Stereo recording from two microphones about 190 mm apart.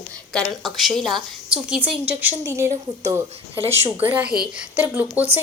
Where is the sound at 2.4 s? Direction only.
15° right (ahead or behind).